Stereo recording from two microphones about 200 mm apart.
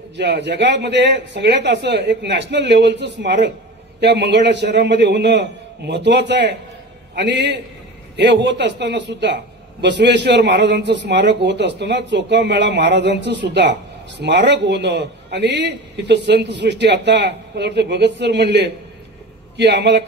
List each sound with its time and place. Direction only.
0.2 s speech: 60° right (ahead or behind)